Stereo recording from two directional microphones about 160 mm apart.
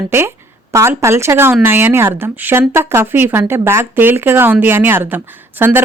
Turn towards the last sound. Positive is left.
turn(degrees=-10)  # may be behind; listen again after turning